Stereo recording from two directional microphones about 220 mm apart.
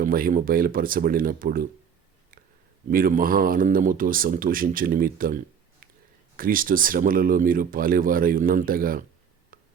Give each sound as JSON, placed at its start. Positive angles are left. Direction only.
{"t": 0.0, "sound": "speech", "side_deg": -40}
{"t": 2.9, "sound": "speech", "side_deg": -40}